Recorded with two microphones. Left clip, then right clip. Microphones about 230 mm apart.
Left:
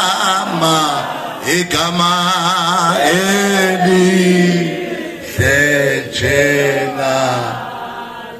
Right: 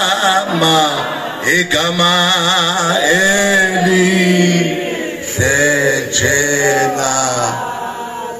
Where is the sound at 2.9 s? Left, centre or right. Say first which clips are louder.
Right 1 dB; centre.